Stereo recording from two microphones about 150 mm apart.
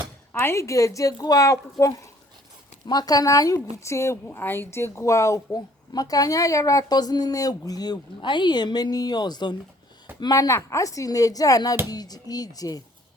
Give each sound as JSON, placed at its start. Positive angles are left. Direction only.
{"t": 0.4, "sound": "a woman's voice", "side_deg": 20}